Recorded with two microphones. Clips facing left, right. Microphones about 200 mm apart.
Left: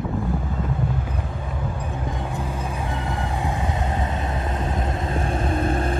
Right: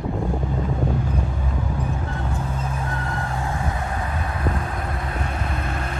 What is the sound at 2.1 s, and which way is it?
Vehicle, 15° left (ahead or behind).